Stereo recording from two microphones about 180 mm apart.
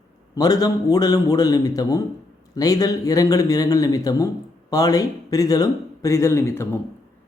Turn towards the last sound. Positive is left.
turn(degrees=15)  # may be behind; listen again after turning